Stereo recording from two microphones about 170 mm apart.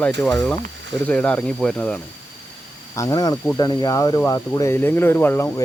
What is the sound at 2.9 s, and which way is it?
Speech, 20° left (ahead or behind).